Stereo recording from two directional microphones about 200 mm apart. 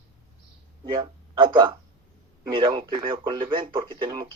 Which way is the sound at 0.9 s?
20° right (ahead or behind).